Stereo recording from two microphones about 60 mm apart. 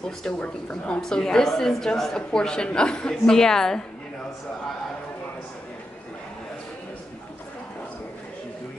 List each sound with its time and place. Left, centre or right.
0.0 s a woman's voice: centre